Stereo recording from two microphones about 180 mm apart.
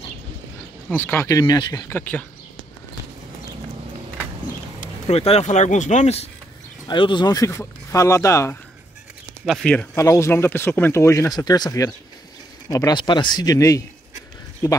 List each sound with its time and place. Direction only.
0.8 s speech: 10° left (ahead or behind)
4.7 s speech: 35° left (ahead or behind)
6.9 s speech: 25° left (ahead or behind)
9.5 s speech: 5° left (ahead or behind)